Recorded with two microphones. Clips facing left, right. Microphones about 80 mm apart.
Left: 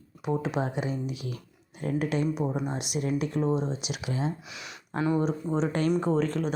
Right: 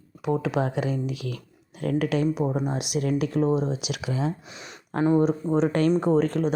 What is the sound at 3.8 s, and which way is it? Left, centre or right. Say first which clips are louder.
Speech: right 3 dB; right.